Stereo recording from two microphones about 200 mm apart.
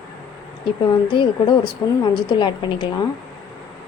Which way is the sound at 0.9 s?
20° left (ahead or behind).